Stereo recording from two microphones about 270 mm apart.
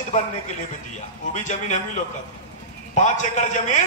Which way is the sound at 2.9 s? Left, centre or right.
Left.